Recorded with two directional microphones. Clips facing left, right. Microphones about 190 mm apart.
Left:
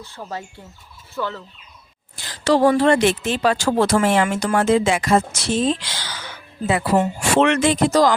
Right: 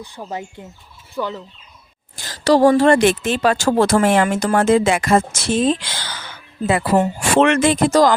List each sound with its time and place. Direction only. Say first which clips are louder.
0.0 s speech: right 3 dB; 15° right (ahead or behind)
2.2 s speech: right 3 dB; 40° right (ahead or behind)